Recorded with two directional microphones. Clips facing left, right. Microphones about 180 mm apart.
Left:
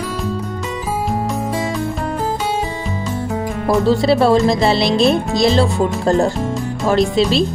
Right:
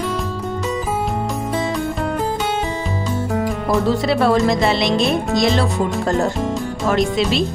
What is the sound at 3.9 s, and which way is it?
Music, 30° left (ahead or behind).